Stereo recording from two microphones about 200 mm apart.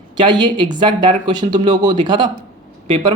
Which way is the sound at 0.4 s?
25° right (ahead or behind).